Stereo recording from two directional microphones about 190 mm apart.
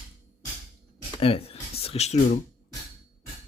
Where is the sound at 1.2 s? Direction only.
30° left (ahead or behind).